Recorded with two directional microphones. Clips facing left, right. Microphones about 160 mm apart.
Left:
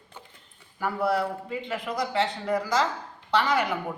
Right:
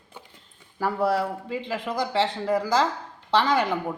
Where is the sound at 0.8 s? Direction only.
35° right (ahead or behind).